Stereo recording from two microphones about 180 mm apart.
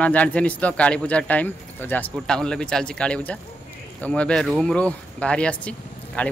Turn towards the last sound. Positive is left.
turn(degrees=5)  # may be behind; listen again after turning